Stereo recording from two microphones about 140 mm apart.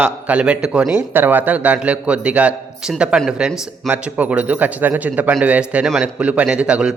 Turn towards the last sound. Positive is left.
turn(degrees=-10)  # may be behind; listen again after turning